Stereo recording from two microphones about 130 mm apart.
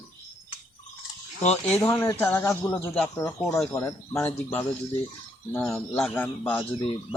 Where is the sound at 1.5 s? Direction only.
5° left (ahead or behind).